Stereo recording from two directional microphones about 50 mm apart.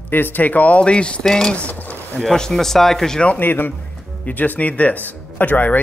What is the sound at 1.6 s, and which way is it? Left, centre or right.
Speech, left.